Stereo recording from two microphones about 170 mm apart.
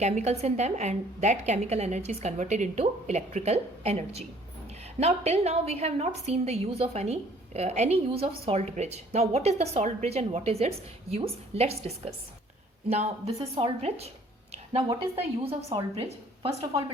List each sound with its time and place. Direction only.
0.0 s a woman's voice: 40° right (ahead or behind)
14.5 s a sound: 35° right (ahead or behind)
15.4 s a woman's voice: 35° right (ahead or behind)